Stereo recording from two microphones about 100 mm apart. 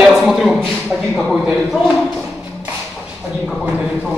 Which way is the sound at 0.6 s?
5° left (ahead or behind).